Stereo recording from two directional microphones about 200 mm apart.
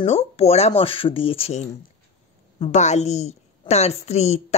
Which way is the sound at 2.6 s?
35° left (ahead or behind).